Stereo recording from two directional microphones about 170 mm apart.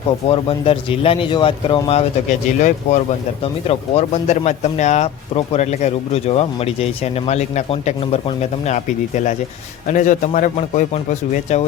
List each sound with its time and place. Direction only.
0.3 s a man's voice: 35° left (ahead or behind)